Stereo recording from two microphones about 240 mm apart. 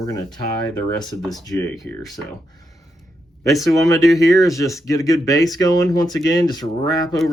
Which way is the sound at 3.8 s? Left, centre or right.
Centre.